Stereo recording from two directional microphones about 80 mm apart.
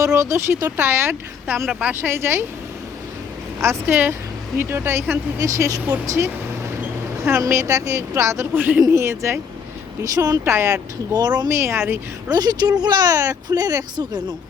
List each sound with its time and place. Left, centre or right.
0.0 s speech: right
3.8 s speech: right
5.5 s speech: right
8.5 s speech: right
8.9 s speech: right
10.0 s speech: right
10.4 s speech: right
11.1 s speech: right
11.4 s speech: right
12.3 s speech: right